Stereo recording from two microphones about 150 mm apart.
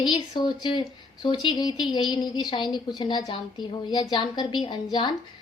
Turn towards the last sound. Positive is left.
turn(degrees=30)  # may be behind; listen again after turning